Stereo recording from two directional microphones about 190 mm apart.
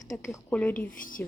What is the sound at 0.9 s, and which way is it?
Speech, 45° left (ahead or behind).